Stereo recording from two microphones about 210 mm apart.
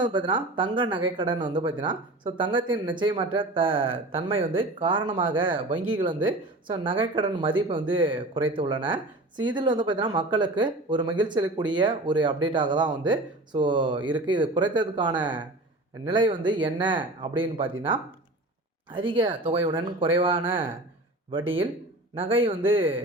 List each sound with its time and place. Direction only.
0.0 s speech: 20° right (ahead or behind)
18.9 s speech: 25° right (ahead or behind)
21.3 s speech: 25° right (ahead or behind)